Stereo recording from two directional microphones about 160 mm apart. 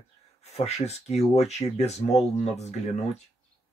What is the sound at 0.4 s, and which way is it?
Speech, 40° left (ahead or behind).